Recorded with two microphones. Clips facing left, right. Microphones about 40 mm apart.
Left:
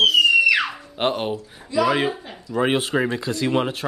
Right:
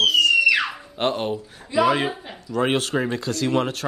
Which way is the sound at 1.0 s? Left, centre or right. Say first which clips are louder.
Left 1 dB; centre.